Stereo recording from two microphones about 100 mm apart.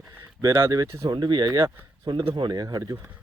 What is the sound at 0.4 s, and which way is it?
Speech, 35° right (ahead or behind).